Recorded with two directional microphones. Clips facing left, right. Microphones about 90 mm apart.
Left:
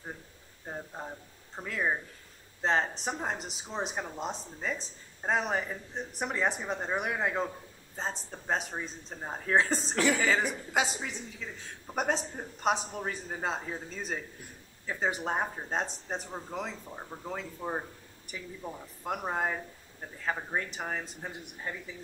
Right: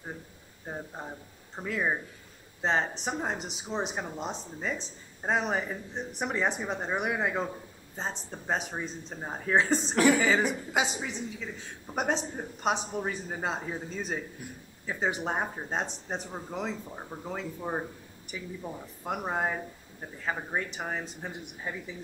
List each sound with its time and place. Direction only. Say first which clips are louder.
0.7 s speech: right 1 dB; 5° right (ahead or behind)
9.9 s speech: right 5 dB; 20° right (ahead or behind)
10.2 s speech: right 2 dB; 5° right (ahead or behind)